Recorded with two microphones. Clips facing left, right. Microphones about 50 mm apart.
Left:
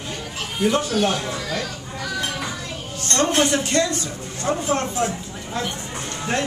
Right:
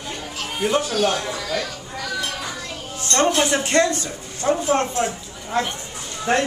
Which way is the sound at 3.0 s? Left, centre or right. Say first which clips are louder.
Right 1 dB; right.